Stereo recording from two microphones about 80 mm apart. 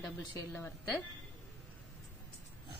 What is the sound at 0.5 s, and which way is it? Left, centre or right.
Speech, left.